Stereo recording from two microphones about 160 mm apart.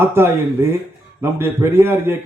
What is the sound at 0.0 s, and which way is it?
A man's voice, 15° right (ahead or behind).